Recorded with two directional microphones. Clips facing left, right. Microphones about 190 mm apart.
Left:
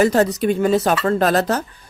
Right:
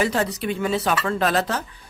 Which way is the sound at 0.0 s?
40° left (ahead or behind).